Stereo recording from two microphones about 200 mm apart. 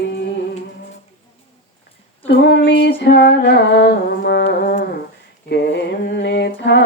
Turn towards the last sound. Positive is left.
turn(degrees=55)  # may be behind; listen again after turning